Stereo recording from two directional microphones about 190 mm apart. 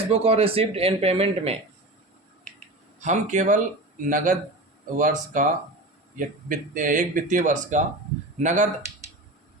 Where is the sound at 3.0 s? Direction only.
40° right (ahead or behind).